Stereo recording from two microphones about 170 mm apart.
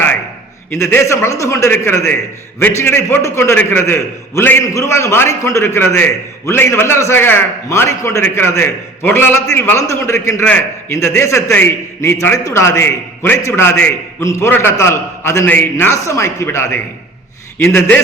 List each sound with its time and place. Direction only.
0.7 s a man's voice: 15° left (ahead or behind)